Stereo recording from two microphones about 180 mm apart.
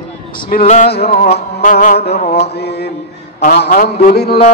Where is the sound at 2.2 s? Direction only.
40° left (ahead or behind).